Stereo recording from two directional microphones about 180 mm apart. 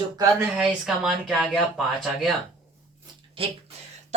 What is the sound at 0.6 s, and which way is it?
Speech, centre (ahead or behind).